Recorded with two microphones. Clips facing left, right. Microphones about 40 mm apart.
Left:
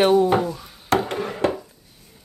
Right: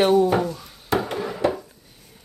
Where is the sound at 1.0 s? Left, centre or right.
Left.